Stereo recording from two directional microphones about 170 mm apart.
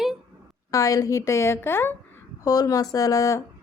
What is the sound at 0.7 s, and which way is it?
A woman's voice, 20° left (ahead or behind).